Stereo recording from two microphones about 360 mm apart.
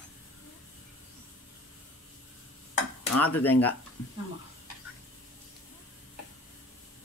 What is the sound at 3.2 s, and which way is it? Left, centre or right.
Speech, centre.